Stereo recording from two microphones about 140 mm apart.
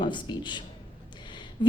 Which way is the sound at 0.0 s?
35° left (ahead or behind).